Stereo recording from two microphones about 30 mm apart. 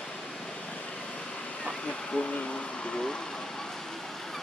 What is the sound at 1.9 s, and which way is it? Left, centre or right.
Speech, left.